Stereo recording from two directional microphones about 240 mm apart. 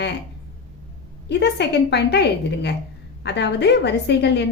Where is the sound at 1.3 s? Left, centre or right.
Left.